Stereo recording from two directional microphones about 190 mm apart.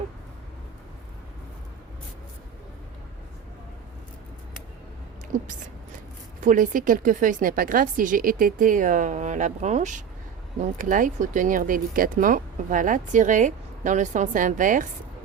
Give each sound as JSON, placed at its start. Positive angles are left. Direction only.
{"t": 5.3, "sound": "speech", "side_deg": -40}